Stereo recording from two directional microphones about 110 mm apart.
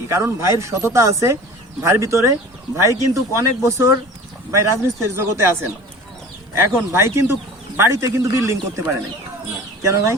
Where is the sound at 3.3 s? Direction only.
25° right (ahead or behind).